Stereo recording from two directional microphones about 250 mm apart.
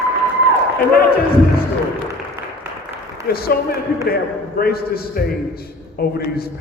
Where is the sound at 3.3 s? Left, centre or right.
Left.